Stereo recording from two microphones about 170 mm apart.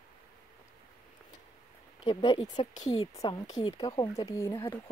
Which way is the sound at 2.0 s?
30° left (ahead or behind).